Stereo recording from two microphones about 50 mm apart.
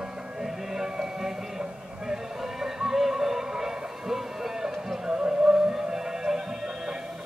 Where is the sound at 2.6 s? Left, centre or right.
Centre.